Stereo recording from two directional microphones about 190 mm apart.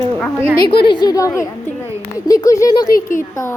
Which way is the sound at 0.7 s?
25° left (ahead or behind).